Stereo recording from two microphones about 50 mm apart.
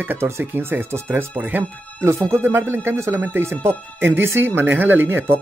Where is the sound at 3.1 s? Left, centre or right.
Right.